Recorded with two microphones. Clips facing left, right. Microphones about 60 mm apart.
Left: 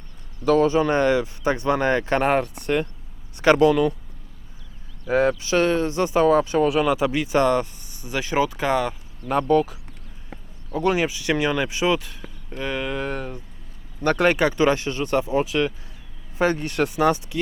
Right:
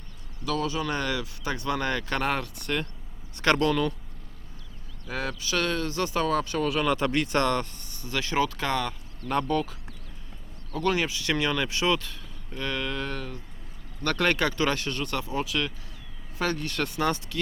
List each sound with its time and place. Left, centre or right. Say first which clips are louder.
0.4 s speech: left 11 dB; left; by 3.9 s centre
5.0 s speech: left 12 dB; left